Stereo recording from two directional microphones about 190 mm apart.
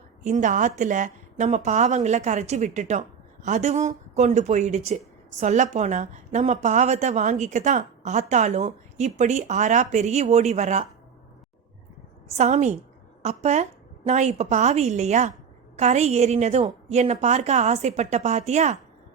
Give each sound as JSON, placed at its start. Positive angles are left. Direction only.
{"t": 0.3, "sound": "a woman's voice", "side_deg": -40}
{"t": 12.3, "sound": "a woman's voice", "side_deg": -35}